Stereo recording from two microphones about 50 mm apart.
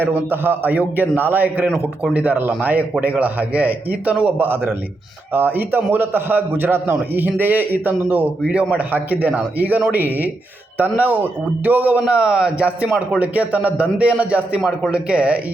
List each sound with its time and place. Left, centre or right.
0.0 s a man's voice: right
4.4 s a man's voice: right